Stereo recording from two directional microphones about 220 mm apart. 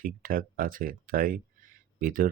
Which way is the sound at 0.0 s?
40° right (ahead or behind).